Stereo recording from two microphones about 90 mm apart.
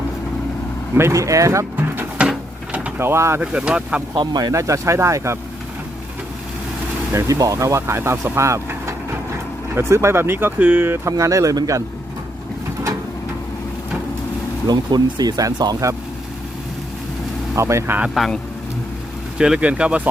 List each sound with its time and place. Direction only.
0.9 s speech: 35° right (ahead or behind)
1.7 s a sound: 20° right (ahead or behind)
3.0 s speech: 30° right (ahead or behind)
3.4 s speech: 15° right (ahead or behind)
4.1 s speech: 50° right (ahead or behind)
4.5 s speech: 35° right (ahead or behind)
7.1 s speech: 35° right (ahead or behind)
14.7 s speech: 50° right (ahead or behind)
17.5 s speech: 35° right (ahead or behind)
18.2 s speech: 5° right (ahead or behind)
19.4 s speech: 10° right (ahead or behind)